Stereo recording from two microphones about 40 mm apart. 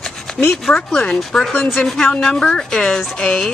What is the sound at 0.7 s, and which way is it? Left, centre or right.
A woman's voice, centre.